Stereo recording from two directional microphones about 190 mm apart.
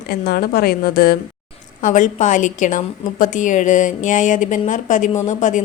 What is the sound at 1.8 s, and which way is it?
A woman's voice, 40° left (ahead or behind).